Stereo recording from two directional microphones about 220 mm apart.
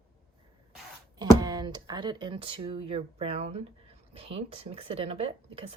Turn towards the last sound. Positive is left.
turn(degrees=-25)  # may be behind; listen again after turning